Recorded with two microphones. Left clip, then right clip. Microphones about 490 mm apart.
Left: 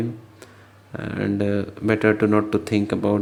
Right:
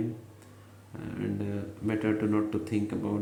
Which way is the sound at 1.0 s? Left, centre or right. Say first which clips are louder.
Left 11 dB; right.